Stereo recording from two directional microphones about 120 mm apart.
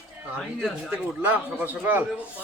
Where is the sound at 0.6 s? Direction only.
10° right (ahead or behind).